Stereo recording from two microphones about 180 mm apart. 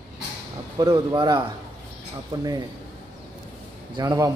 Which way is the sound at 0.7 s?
25° right (ahead or behind).